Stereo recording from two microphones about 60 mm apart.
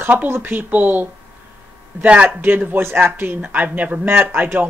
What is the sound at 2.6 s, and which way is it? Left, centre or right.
Speech, right.